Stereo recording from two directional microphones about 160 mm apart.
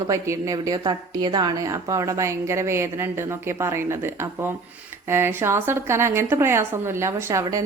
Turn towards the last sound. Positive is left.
turn(degrees=-20)  # may be behind; listen again after turning